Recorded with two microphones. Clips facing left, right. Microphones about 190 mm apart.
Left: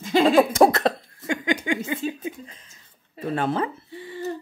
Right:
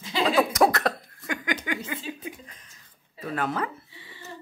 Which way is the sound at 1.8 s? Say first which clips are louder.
Left 7 dB; 25° left (ahead or behind).